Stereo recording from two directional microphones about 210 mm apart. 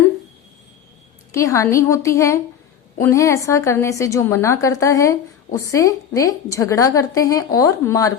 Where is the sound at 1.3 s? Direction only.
15° left (ahead or behind).